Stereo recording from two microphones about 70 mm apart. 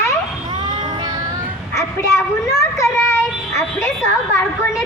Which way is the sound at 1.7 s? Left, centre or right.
Left.